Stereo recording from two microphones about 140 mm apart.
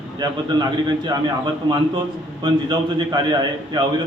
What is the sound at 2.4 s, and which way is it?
A man's voice, 30° right (ahead or behind).